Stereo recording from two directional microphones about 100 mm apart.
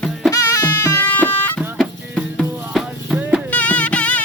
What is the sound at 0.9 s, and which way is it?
Music, 20° left (ahead or behind).